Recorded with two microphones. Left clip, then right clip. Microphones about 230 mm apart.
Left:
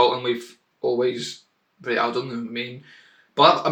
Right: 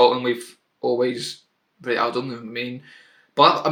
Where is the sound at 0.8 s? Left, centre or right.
Right.